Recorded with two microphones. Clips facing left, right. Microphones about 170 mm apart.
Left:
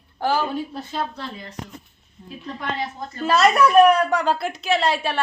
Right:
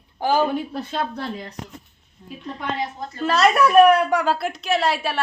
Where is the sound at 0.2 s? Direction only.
15° right (ahead or behind).